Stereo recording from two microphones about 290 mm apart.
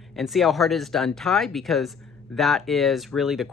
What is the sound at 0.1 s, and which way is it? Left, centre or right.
Speech, centre.